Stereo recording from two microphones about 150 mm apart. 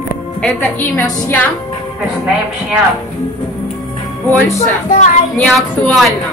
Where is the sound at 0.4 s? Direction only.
10° left (ahead or behind).